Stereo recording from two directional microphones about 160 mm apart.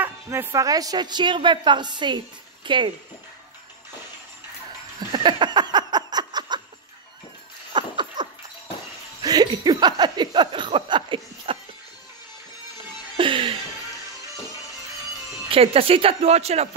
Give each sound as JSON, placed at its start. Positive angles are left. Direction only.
{"t": 0.0, "sound": "a woman's voice", "side_deg": -15}
{"t": 5.1, "sound": "a sound", "side_deg": -30}
{"t": 7.7, "sound": "dog", "side_deg": -30}
{"t": 9.2, "sound": "a sound", "side_deg": -25}
{"t": 13.2, "sound": "music", "side_deg": -30}
{"t": 15.5, "sound": "speech", "side_deg": -35}